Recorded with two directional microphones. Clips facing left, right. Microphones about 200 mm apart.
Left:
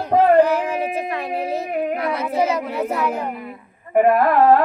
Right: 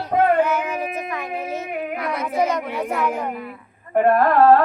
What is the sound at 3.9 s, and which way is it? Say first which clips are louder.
Music: left 1 dB; 10° left (ahead or behind).